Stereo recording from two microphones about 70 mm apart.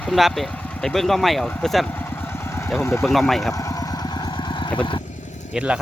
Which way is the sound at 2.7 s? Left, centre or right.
Left.